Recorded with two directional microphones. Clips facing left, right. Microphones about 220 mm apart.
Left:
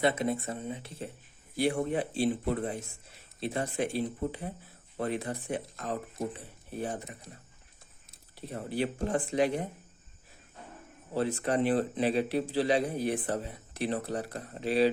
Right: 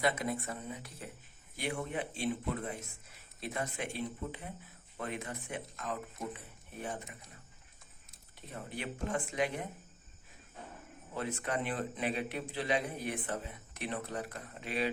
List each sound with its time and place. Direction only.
0.0 s speech: 25° left (ahead or behind)
8.4 s speech: 35° left (ahead or behind)
11.1 s speech: 35° left (ahead or behind)